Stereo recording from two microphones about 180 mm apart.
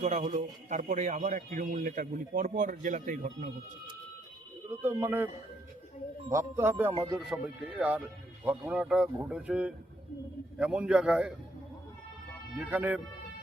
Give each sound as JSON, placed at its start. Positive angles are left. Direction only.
{"t": 0.0, "sound": "speech", "side_deg": -40}
{"t": 4.7, "sound": "speech", "side_deg": -15}
{"t": 6.9, "sound": "speech", "side_deg": -30}
{"t": 7.3, "sound": "a man's voice", "side_deg": -5}
{"t": 12.5, "sound": "speech", "side_deg": -10}